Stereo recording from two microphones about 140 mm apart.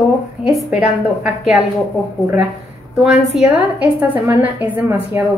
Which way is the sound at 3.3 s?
10° right (ahead or behind).